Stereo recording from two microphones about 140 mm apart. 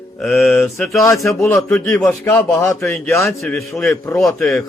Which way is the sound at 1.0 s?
20° left (ahead or behind).